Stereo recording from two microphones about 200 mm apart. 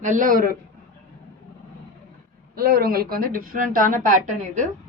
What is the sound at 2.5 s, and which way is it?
A woman's voice, 50° right (ahead or behind).